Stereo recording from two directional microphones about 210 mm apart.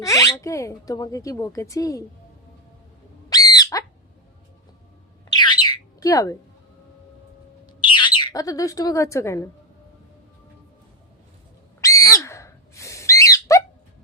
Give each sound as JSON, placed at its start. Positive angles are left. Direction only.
{"t": 0.0, "sound": "speech", "side_deg": 15}
{"t": 3.2, "sound": "a sound", "side_deg": 15}
{"t": 5.3, "sound": "bird", "side_deg": 20}
{"t": 7.8, "sound": "speech", "side_deg": 25}
{"t": 11.8, "sound": "owl", "side_deg": 15}